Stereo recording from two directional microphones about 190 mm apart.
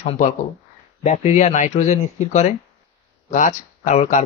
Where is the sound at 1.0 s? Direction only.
35° left (ahead or behind).